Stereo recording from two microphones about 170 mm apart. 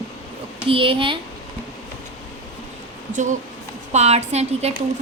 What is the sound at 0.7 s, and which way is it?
Speech, 30° right (ahead or behind).